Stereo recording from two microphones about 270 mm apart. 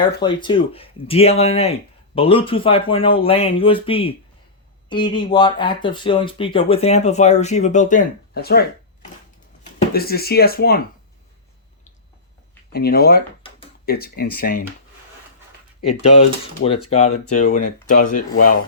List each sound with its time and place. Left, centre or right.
0.0 s speech: centre; by 8.6 s left
9.9 s speech: left
12.7 s speech: left
16.0 s speech: left